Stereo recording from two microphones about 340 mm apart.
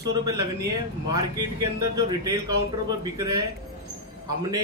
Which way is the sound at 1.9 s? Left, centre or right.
Centre.